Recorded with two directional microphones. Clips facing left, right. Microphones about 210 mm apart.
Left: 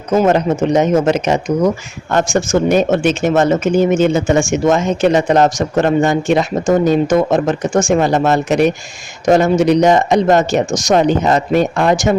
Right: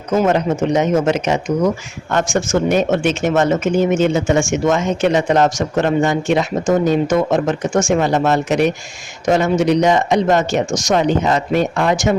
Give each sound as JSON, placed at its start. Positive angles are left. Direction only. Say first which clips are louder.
{"t": 0.1, "sound": "speech", "louder": "left 3 dB", "side_deg": 35}